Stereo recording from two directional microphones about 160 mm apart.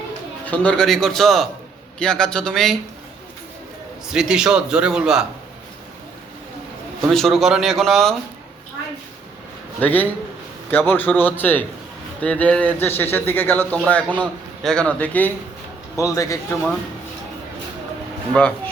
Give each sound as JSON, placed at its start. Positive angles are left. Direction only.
{"t": 0.4, "sound": "a man's voice", "side_deg": 10}
{"t": 4.1, "sound": "a man's voice", "side_deg": -5}
{"t": 7.1, "sound": "a man's voice", "side_deg": 0}
{"t": 9.8, "sound": "a man's voice", "side_deg": 10}
{"t": 18.3, "sound": "speech", "side_deg": 5}